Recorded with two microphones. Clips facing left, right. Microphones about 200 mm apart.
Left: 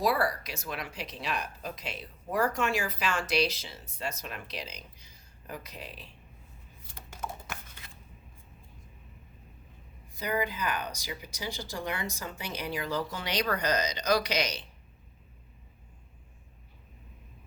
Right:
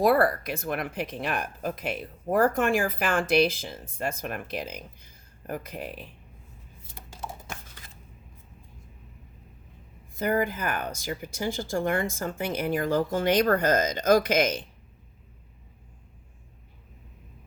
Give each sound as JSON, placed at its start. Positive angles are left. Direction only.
{"t": 0.0, "sound": "speech", "side_deg": -55}
{"t": 6.9, "sound": "a sound", "side_deg": -30}
{"t": 10.2, "sound": "speech", "side_deg": -50}